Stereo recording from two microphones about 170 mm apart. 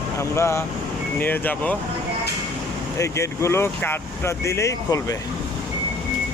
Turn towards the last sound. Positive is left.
turn(degrees=20)  # may be behind; listen again after turning